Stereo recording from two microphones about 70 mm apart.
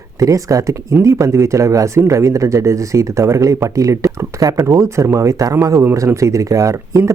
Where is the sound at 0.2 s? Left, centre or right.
Right.